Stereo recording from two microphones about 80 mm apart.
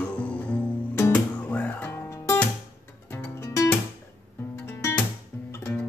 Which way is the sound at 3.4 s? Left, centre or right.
Left.